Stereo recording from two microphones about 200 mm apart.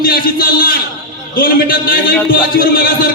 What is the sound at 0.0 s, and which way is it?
A man's voice, 45° left (ahead or behind).